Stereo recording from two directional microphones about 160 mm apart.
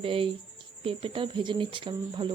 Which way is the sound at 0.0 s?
35° right (ahead or behind).